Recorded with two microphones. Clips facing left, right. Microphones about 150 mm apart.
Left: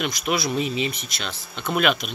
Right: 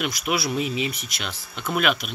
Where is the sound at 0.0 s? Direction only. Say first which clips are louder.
Left 1 dB; 5° right (ahead or behind).